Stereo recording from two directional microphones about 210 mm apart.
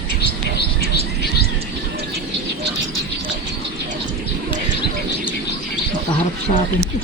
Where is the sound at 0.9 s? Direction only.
50° left (ahead or behind).